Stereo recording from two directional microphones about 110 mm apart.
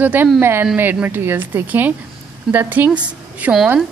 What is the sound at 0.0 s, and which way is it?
A woman's voice, 15° right (ahead or behind).